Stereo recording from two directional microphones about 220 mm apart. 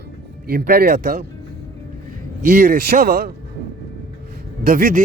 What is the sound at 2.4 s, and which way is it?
Speech, 40° right (ahead or behind).